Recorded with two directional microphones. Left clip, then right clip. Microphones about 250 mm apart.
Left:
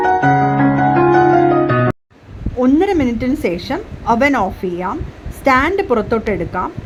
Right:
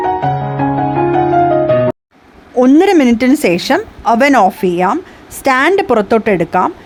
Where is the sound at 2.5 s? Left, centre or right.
Right.